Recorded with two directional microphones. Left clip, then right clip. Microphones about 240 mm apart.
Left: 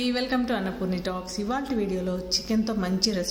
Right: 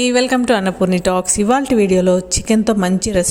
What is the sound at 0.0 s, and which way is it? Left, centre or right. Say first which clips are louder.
A woman's voice: right 12 dB; right.